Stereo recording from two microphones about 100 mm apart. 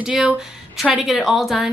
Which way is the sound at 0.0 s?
5° right (ahead or behind).